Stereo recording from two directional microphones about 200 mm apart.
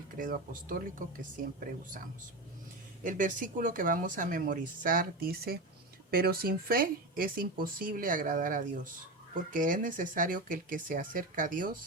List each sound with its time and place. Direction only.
0.2 s speech: 45° right (ahead or behind)
3.0 s speech: 40° right (ahead or behind)